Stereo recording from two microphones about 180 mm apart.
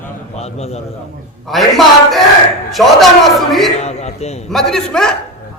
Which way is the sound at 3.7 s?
35° left (ahead or behind).